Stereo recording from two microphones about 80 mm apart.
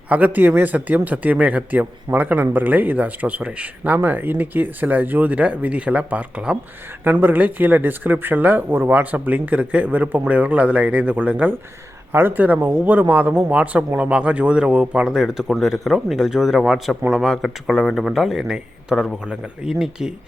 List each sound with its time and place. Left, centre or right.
0.1 s speech: right